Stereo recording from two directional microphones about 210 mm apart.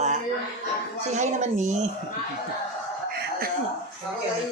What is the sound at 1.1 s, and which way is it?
Speech, 35° right (ahead or behind).